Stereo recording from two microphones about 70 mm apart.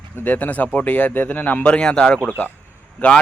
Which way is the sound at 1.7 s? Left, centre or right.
Centre.